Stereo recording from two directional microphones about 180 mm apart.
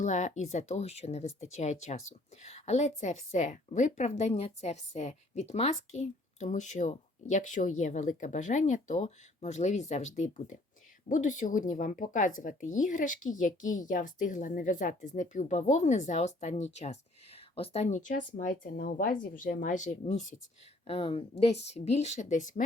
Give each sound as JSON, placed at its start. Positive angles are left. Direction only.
{"t": 0.0, "sound": "a woman's voice", "side_deg": 40}
{"t": 20.8, "sound": "a woman's voice", "side_deg": 30}